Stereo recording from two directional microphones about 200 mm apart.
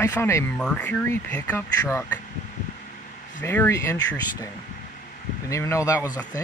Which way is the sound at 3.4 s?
10° left (ahead or behind).